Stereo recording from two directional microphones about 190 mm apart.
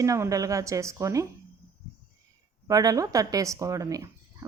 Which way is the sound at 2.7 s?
20° right (ahead or behind).